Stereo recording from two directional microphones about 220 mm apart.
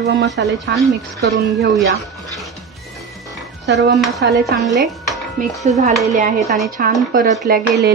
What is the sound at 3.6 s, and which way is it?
Speech, 50° right (ahead or behind).